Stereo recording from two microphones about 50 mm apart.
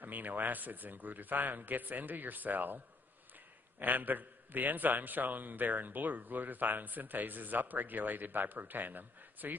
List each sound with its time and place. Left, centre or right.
0.0 s a man's voice: right
3.8 s a man's voice: right